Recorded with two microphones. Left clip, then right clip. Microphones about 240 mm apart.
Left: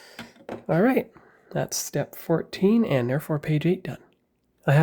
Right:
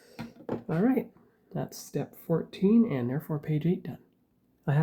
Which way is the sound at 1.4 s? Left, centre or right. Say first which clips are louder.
Left 10 dB; left.